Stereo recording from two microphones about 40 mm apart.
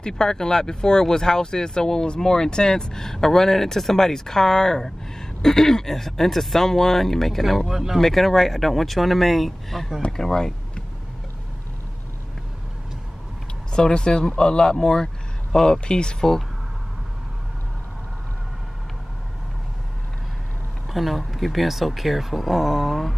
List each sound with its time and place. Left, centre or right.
0.0 s speech: centre
8.0 s speech: centre
10.1 s speech: centre
13.7 s speech: left
20.9 s speech: centre